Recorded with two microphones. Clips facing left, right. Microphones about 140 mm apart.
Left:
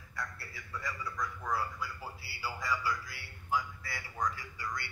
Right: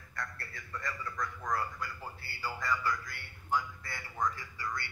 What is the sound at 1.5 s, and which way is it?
A man's voice, 5° left (ahead or behind).